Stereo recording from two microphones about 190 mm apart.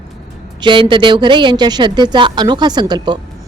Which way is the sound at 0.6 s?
25° right (ahead or behind).